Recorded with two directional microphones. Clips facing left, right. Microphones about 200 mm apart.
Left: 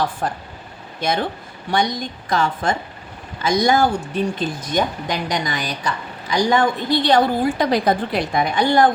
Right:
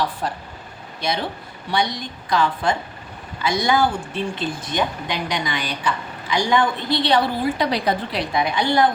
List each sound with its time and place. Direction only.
0.2 s a woman's voice: 50° left (ahead or behind)